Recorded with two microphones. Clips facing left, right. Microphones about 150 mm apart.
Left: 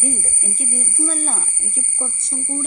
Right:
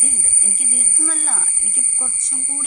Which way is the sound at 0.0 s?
25° left (ahead or behind).